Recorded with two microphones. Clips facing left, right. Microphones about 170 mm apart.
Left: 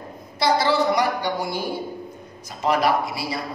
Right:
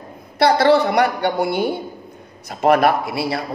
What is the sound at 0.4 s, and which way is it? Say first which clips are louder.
A woman's voice: right 6 dB; 60° right (ahead or behind).